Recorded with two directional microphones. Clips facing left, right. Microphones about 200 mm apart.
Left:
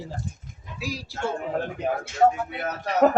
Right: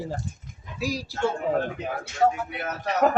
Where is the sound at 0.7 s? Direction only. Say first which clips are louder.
Right 4 dB; 40° right (ahead or behind).